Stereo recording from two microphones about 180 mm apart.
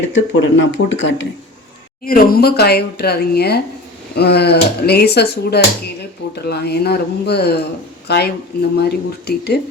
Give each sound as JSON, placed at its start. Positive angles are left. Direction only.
{"t": 0.1, "sound": "speech", "side_deg": 90}
{"t": 2.0, "sound": "speech", "side_deg": 55}